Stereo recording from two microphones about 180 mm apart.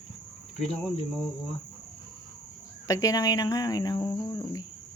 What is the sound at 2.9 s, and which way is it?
Speech, 20° left (ahead or behind).